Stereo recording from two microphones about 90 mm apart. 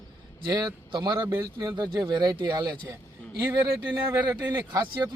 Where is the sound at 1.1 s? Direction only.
35° right (ahead or behind).